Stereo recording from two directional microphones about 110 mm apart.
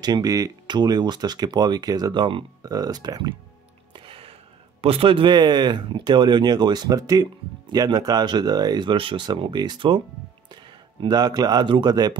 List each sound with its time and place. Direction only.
0.0 s speech: 35° right (ahead or behind)
3.9 s music: 50° right (ahead or behind)
4.8 s speech: 60° right (ahead or behind); by 12.2 s 40° right (ahead or behind)